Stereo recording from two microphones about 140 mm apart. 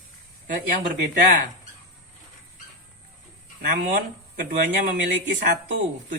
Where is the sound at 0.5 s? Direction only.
70° right (ahead or behind).